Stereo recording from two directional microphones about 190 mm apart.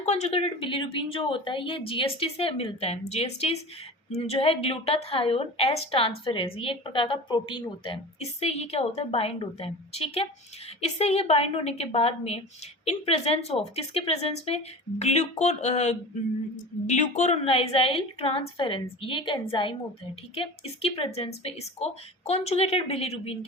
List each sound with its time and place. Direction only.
0.0 s a woman's voice: 35° left (ahead or behind)